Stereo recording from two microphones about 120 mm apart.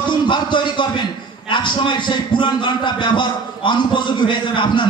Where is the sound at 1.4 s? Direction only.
40° left (ahead or behind).